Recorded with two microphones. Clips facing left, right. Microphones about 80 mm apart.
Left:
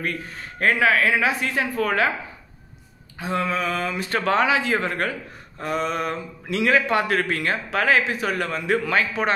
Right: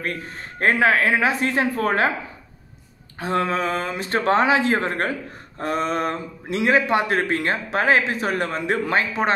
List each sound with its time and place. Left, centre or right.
0.0 s speech: right
3.2 s speech: right